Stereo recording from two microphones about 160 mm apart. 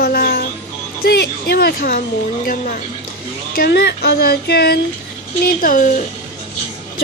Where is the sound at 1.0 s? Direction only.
90° left.